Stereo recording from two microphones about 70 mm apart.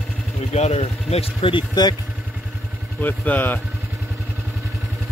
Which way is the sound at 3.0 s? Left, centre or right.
Left.